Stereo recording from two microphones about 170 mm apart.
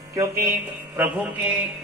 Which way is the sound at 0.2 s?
15° right (ahead or behind).